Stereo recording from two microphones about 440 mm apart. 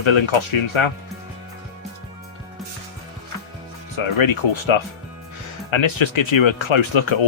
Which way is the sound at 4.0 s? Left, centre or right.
Left.